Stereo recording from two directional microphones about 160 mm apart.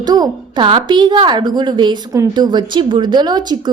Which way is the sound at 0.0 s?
25° right (ahead or behind).